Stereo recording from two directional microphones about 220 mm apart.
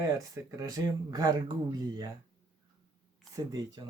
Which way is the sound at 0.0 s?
15° right (ahead or behind).